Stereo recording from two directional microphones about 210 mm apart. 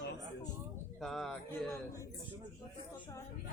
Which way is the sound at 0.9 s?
Centre (ahead or behind).